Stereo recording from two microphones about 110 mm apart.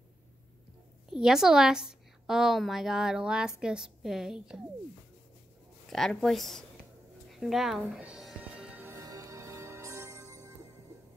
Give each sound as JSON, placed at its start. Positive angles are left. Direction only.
{"t": 1.1, "sound": "a woman's voice", "side_deg": -5}
{"t": 5.9, "sound": "a woman's voice", "side_deg": 5}
{"t": 8.4, "sound": "music", "side_deg": -10}
{"t": 8.8, "sound": "music", "side_deg": -30}